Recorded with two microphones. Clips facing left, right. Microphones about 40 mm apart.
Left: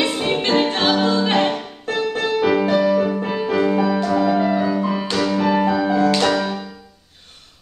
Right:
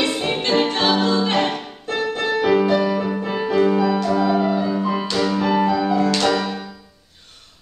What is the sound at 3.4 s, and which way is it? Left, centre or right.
Music, centre.